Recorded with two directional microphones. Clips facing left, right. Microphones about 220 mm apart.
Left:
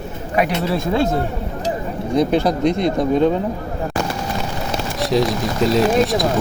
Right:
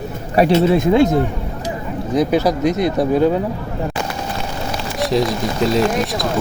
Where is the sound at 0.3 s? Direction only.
30° right (ahead or behind).